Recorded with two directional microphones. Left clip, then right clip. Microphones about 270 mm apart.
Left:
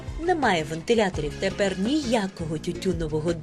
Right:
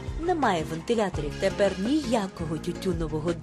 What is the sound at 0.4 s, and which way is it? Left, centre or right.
Speech, centre.